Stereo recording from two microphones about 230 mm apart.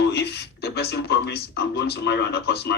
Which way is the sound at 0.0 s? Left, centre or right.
Left.